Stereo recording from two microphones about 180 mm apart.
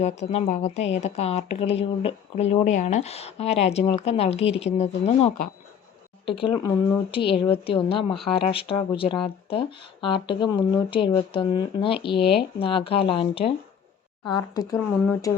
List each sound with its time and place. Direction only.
0.0 s speech: 40° left (ahead or behind); by 15.3 s 15° left (ahead or behind)